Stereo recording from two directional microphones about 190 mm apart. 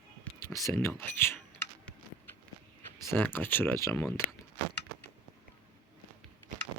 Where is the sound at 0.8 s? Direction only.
10° left (ahead or behind).